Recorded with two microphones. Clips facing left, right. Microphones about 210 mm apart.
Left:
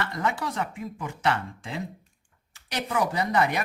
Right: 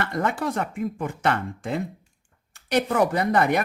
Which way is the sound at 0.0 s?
50° right (ahead or behind).